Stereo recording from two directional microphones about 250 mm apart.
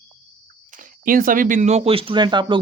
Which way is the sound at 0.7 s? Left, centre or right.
Right.